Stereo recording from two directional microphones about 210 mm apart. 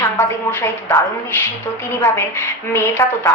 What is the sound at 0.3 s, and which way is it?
A woman's voice, 15° left (ahead or behind).